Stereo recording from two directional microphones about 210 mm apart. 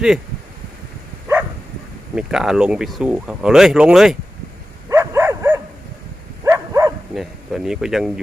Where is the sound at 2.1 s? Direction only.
Centre (ahead or behind).